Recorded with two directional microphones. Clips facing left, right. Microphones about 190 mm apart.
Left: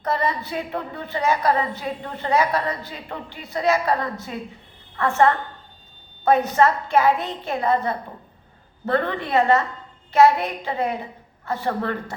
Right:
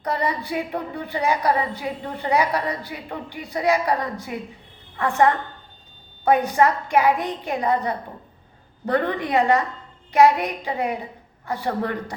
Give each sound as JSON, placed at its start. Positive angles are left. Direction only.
{"t": 0.0, "sound": "a woman's voice", "side_deg": -15}